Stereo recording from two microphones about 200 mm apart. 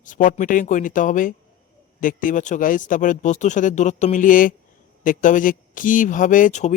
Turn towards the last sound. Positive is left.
turn(degrees=35)  # may be behind; listen again after turning